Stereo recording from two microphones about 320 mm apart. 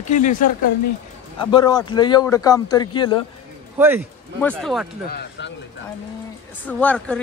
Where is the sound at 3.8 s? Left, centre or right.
Centre.